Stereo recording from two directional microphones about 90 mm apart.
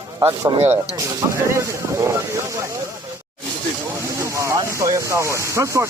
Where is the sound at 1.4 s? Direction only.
35° right (ahead or behind).